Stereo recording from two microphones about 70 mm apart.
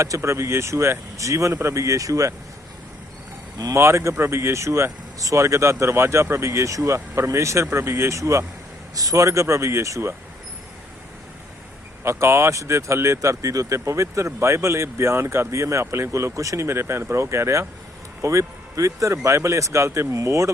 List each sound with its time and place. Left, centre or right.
0.2 s speech: right
3.8 s speech: right
12.0 s speech: right